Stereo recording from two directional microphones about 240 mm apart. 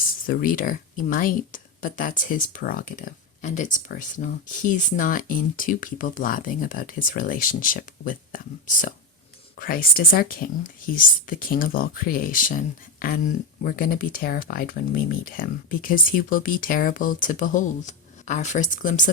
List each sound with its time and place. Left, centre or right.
0.3 s speech: left